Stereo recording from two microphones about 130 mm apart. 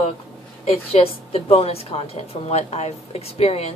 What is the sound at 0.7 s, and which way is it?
A woman's voice, 50° left (ahead or behind).